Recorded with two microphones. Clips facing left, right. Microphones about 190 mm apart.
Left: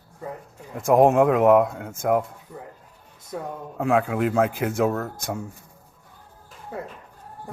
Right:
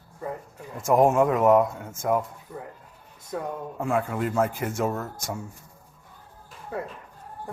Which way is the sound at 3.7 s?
75° left (ahead or behind).